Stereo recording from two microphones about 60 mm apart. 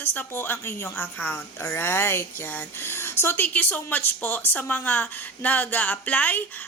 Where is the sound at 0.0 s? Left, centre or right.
Left.